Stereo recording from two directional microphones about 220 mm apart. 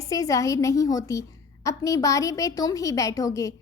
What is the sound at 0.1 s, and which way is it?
A woman's voice, 15° left (ahead or behind).